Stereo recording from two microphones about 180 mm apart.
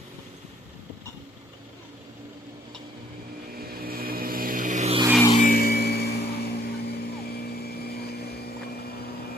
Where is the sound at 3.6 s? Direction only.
55° right (ahead or behind); by 5.0 s 40° right (ahead or behind).